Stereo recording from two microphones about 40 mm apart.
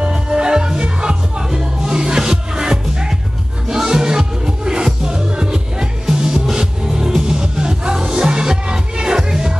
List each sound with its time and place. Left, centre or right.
0.0 s music: centre